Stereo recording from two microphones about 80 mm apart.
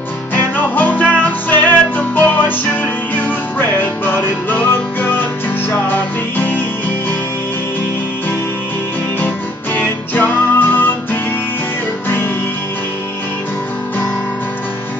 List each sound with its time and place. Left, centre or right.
0.3 s music: left
9.8 s music: left